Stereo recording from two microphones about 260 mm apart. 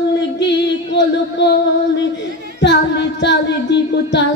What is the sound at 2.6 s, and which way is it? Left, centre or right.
Speech, left.